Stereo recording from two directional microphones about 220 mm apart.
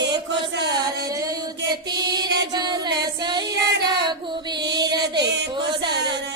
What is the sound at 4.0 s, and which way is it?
Female singing, 20° right (ahead or behind).